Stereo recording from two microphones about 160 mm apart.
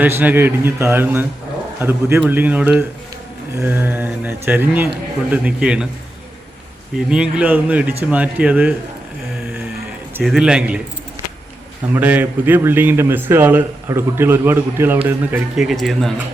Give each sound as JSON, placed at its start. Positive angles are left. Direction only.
{"t": 0.0, "sound": "a man's voice", "side_deg": -10}
{"t": 6.9, "sound": "a man's voice", "side_deg": -5}
{"t": 10.2, "sound": "a man's voice", "side_deg": -5}
{"t": 11.9, "sound": "a man's voice", "side_deg": -10}